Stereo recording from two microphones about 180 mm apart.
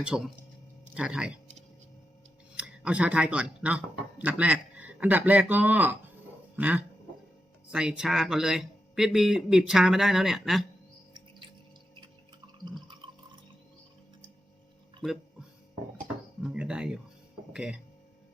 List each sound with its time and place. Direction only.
0.0 s speech: 5° right (ahead or behind)
2.6 s speech: 5° right (ahead or behind)
12.6 s water: 25° right (ahead or behind)
16.4 s speech: 5° right (ahead or behind)